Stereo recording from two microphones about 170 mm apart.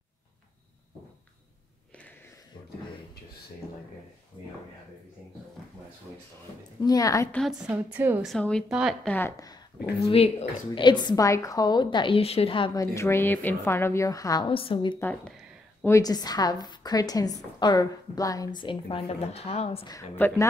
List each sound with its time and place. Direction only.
6.8 s a woman's voice: 20° left (ahead or behind)
7.3 s a woman's voice: centre (ahead or behind)
8.3 s a woman's voice: 5° left (ahead or behind)
9.1 s a woman's voice: 15° left (ahead or behind)
10.0 s a woman's voice: 35° left (ahead or behind)
12.8 s a woman's voice: 15° left (ahead or behind)
15.0 s a woman's voice: 10° left (ahead or behind); by 19.9 s 35° left (ahead or behind)
19.9 s a woman's voice: 15° left (ahead or behind)